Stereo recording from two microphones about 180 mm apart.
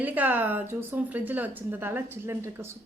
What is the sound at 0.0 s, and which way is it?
A woman's voice, 10° right (ahead or behind).